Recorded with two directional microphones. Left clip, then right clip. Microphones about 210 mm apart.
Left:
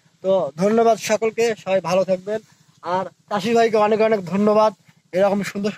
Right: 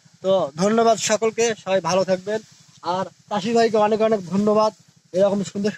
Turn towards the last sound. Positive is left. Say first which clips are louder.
# left 1 dB
turn(degrees=10)  # may be behind; listen again after turning